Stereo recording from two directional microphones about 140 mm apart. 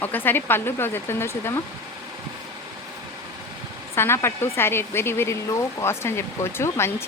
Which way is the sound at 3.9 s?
20° left (ahead or behind).